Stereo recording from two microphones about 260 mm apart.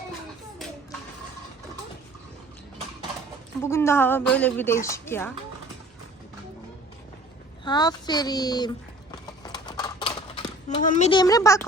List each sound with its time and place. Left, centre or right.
3.6 s a woman's voice: centre
7.6 s a woman's voice: centre
9.2 s clip-clop: centre
10.8 s a woman's voice: left